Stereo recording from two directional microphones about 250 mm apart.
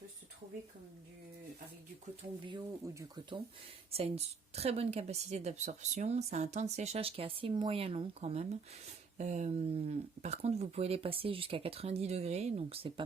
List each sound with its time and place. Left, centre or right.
2.5 s speech: centre